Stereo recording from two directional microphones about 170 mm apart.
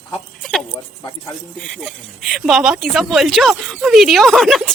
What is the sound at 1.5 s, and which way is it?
Speech, centre (ahead or behind).